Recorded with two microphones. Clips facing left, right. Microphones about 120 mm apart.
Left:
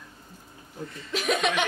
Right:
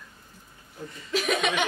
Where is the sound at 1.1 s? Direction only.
Centre (ahead or behind).